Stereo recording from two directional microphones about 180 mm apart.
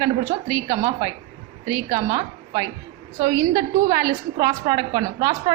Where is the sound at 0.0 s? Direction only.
20° right (ahead or behind).